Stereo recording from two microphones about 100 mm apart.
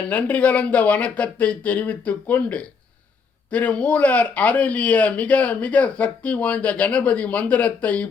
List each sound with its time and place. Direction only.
0.1 s speech: 15° left (ahead or behind)